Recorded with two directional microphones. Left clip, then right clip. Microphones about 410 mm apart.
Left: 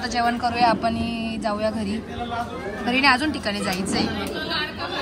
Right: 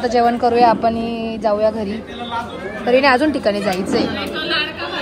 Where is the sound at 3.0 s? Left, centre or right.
Centre.